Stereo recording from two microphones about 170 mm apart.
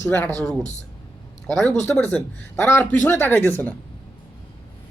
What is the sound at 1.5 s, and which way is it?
A man's voice, 5° left (ahead or behind).